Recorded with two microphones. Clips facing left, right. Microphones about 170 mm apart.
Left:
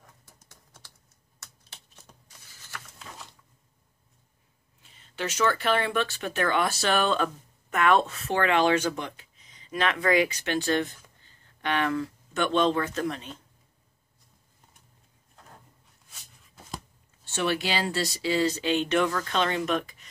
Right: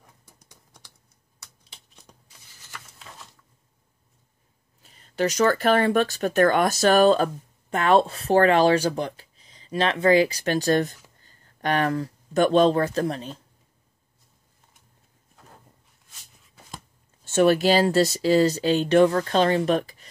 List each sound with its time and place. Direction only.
0.2 s typing: 15° right (ahead or behind)
4.8 s speech: 40° right (ahead or behind)
17.2 s speech: 45° right (ahead or behind)